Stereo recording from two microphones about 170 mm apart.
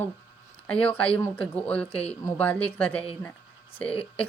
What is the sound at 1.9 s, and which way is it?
Speech, 35° left (ahead or behind).